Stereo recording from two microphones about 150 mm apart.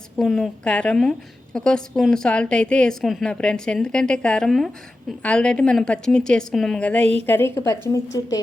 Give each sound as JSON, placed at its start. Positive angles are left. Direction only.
{"t": 0.2, "sound": "a woman's voice", "side_deg": 0}